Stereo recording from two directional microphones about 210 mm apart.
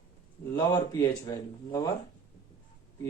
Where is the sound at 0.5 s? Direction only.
15° left (ahead or behind).